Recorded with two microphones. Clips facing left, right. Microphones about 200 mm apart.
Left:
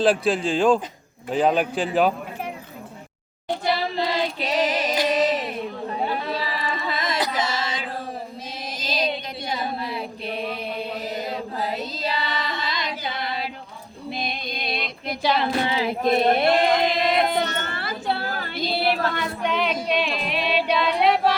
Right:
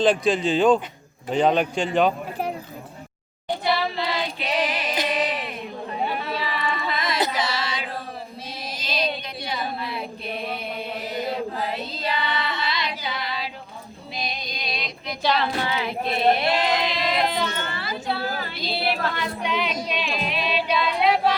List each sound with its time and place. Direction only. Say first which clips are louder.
0.0 s a man's voice: even; centre (ahead or behind)
3.6 s child singing: left 1 dB; 40° left (ahead or behind)
5.0 s music: left 4 dB; 45° left (ahead or behind)
6.3 s a sound: even; 35° left (ahead or behind)
7.3 s music: left 1 dB; 45° left (ahead or behind)
8.8 s a sound: left 1 dB; 45° left (ahead or behind)
9.8 s chant: left 1 dB; 35° left (ahead or behind)
11.6 s carnatic music: left 1 dB; 40° left (ahead or behind)
14.1 s music: left 3 dB; 55° left (ahead or behind)
15.2 s child singing: even; 10° left (ahead or behind)
15.6 s choir: left 3 dB; 30° left (ahead or behind)
16.0 s a sound: left 3 dB; 45° left (ahead or behind)
18.4 s music: left 3 dB; 50° left (ahead or behind)
20.8 s a sound: even; 60° left (ahead or behind)